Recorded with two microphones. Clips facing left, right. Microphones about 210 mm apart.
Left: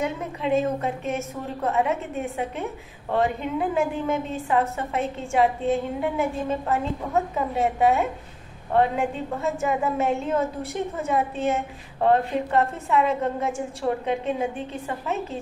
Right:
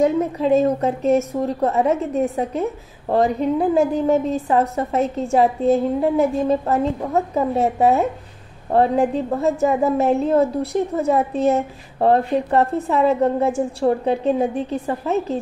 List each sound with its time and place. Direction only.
0.0 s a woman's voice: 40° right (ahead or behind)